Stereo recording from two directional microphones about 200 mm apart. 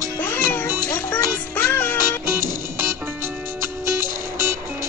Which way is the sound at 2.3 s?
15° right (ahead or behind).